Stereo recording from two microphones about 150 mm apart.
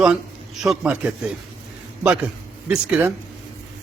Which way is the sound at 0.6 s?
5° right (ahead or behind).